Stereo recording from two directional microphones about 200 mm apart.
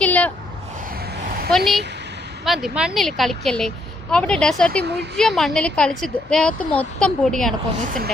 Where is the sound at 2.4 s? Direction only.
Centre (ahead or behind).